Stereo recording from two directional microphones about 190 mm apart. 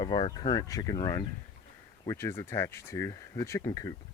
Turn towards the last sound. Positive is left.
turn(degrees=20)  # may be behind; listen again after turning